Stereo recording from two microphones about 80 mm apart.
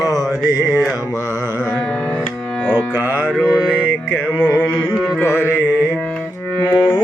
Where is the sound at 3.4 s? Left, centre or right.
Centre.